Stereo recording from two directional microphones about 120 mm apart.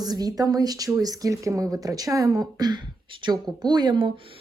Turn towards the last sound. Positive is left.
turn(degrees=-40)  # may be behind; listen again after turning